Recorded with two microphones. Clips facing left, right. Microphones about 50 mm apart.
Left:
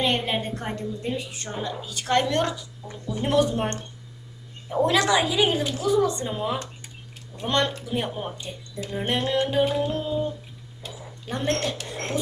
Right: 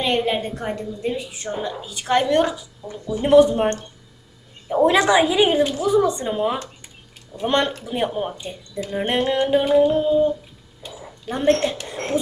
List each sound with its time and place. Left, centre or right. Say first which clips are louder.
0.3 s a woman's voice: right 4 dB; centre
10.8 s a sound: right 4 dB; centre
11.9 s speech: right 5 dB; right